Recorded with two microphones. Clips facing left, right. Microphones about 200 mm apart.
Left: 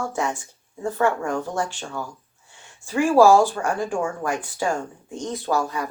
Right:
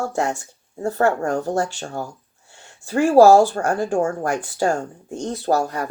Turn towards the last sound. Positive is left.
turn(degrees=-45)  # may be behind; listen again after turning